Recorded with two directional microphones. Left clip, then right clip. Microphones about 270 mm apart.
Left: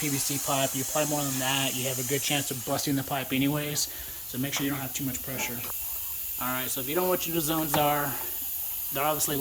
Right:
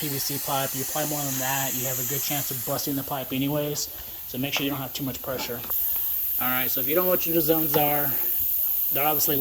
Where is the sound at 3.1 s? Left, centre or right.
Centre.